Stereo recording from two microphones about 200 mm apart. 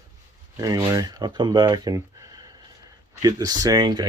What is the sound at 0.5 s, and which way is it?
Speech, 20° right (ahead or behind).